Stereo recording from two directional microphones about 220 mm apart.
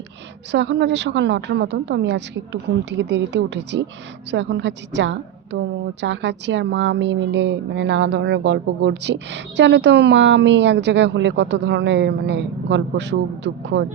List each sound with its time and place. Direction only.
0.5 s a woman's voice: 55° right (ahead or behind)